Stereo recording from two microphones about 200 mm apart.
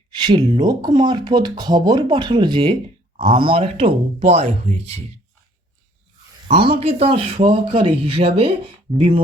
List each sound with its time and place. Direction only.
0.1 s a man's voice: 25° right (ahead or behind)
6.5 s a man's voice: 30° right (ahead or behind)